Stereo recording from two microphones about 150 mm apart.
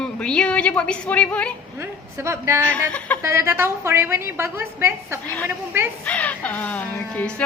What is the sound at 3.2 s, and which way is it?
A woman's voice, 20° right (ahead or behind).